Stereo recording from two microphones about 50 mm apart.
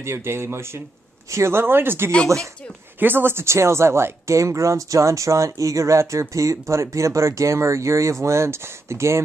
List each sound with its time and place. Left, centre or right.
0.0 s speech: right
2.2 s speech: right
3.0 s speech: right